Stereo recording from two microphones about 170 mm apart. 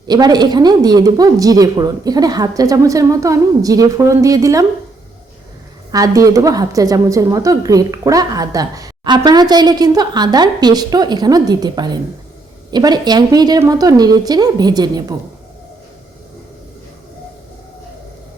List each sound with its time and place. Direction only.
0.1 s a woman's voice: 25° right (ahead or behind)
5.9 s a woman's voice: 20° right (ahead or behind)